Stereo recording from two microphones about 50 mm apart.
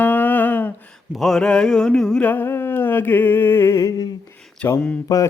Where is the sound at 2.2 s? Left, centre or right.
Left.